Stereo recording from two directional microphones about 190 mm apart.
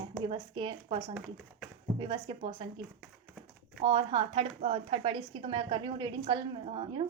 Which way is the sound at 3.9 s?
25° right (ahead or behind).